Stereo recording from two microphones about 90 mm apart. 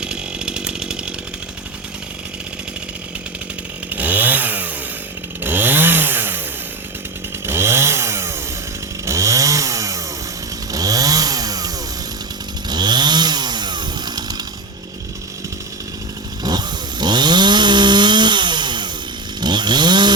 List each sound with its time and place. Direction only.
0.0 s chainsaw: 10° right (ahead or behind)
3.9 s chainsaw: 20° right (ahead or behind)
7.4 s chainsaw: 30° right (ahead or behind); by 14.4 s 50° right (ahead or behind)
16.4 s chainsaw: 50° right (ahead or behind)